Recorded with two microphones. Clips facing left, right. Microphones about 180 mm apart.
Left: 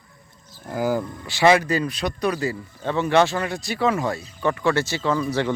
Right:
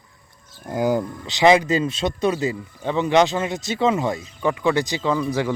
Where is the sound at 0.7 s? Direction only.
20° right (ahead or behind).